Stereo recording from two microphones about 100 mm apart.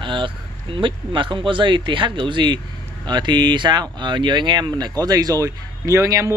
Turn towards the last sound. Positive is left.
turn(degrees=-30)  # may be behind; listen again after turning